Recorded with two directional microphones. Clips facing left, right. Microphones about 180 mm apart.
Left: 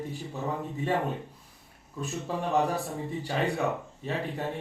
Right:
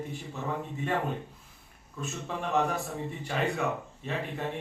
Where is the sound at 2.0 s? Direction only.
35° left (ahead or behind).